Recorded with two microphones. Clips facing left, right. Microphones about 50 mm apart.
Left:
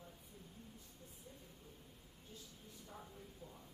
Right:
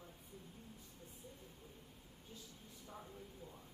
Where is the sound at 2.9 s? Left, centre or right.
Centre.